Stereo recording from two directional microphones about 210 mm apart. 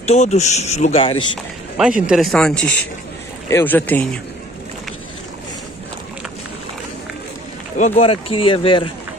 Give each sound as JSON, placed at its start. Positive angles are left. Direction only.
{"t": 0.0, "sound": "speech", "side_deg": 30}
{"t": 1.8, "sound": "a man's voice", "side_deg": -5}
{"t": 7.7, "sound": "speech", "side_deg": 35}